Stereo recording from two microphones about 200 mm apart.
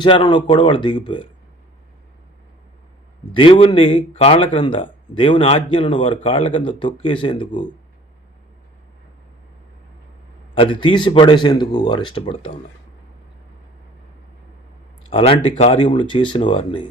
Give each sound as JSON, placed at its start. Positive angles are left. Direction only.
{"t": 0.0, "sound": "speech", "side_deg": 25}
{"t": 3.3, "sound": "speech", "side_deg": 25}
{"t": 10.5, "sound": "speech", "side_deg": 25}
{"t": 15.1, "sound": "speech", "side_deg": 30}